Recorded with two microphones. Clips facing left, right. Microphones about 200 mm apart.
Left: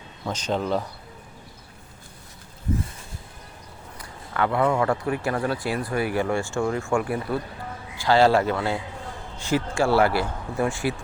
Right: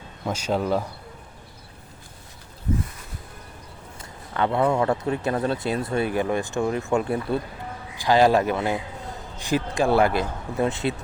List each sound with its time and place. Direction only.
0.3 s speech: 5° right (ahead or behind)
3.9 s a man's voice: 25° right (ahead or behind)